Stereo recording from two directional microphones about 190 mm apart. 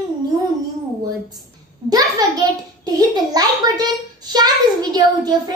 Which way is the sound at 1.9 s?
20° right (ahead or behind).